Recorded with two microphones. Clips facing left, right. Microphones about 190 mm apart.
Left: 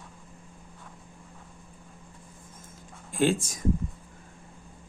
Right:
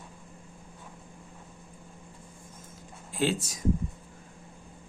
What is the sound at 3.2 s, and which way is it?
Speech, 50° left (ahead or behind).